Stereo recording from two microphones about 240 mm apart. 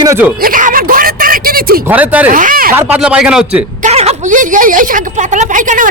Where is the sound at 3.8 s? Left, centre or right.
Right.